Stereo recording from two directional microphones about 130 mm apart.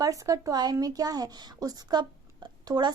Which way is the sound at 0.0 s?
25° right (ahead or behind).